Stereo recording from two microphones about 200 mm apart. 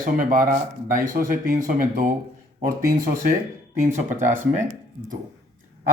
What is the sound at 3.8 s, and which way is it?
Speech, 10° right (ahead or behind).